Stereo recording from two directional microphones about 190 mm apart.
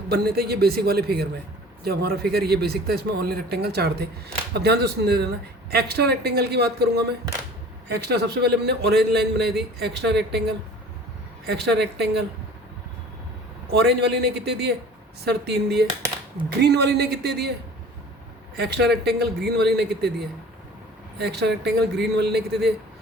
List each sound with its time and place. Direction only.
0.1 s a man's voice: 55° right (ahead or behind)
11.4 s a man's voice: 60° right (ahead or behind)
13.7 s a man's voice: 60° right (ahead or behind)
18.5 s a man's voice: 60° right (ahead or behind)